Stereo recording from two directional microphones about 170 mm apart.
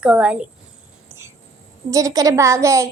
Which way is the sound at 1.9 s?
20° right (ahead or behind).